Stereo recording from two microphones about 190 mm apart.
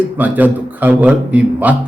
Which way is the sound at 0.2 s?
10° right (ahead or behind).